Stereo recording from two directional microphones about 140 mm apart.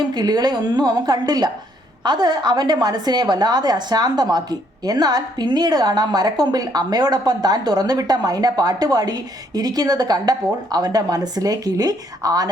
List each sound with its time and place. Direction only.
0.1 s a woman's voice: 30° right (ahead or behind)